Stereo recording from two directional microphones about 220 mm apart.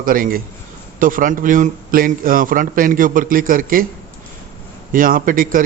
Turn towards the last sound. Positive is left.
turn(degrees=-40)  # may be behind; listen again after turning